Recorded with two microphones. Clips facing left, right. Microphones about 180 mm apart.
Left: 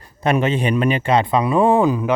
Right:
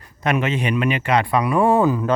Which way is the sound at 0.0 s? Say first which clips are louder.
Left 3 dB; 30° left (ahead or behind).